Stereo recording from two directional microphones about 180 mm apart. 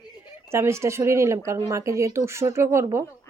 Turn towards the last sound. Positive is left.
turn(degrees=-15)  # may be behind; listen again after turning